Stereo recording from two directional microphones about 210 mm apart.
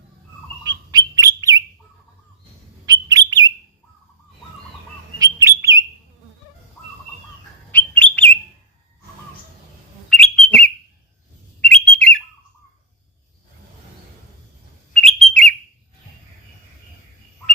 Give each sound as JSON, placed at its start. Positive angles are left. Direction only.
{"t": 0.6, "sound": "bird", "side_deg": -20}
{"t": 2.8, "sound": "bird", "side_deg": -15}
{"t": 5.2, "sound": "bird", "side_deg": -15}
{"t": 7.7, "sound": "bird", "side_deg": 5}
{"t": 10.1, "sound": "bird", "side_deg": 5}
{"t": 11.7, "sound": "bird", "side_deg": 5}
{"t": 14.9, "sound": "bird", "side_deg": 0}